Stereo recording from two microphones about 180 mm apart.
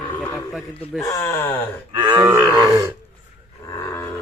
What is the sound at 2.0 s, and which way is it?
Grunt, 20° right (ahead or behind).